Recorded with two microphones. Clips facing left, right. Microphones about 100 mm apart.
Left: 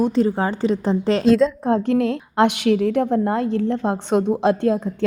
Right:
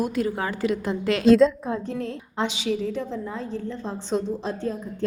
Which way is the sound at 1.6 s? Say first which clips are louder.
Left 10 dB; 70° left (ahead or behind).